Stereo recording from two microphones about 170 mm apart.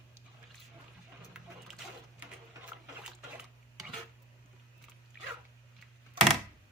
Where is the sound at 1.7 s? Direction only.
Centre (ahead or behind).